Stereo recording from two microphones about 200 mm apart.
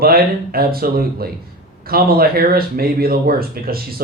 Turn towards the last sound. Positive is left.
turn(degrees=-50)  # may be behind; listen again after turning